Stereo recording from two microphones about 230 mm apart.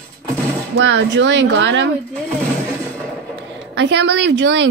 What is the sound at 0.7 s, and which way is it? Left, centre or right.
Speech, right.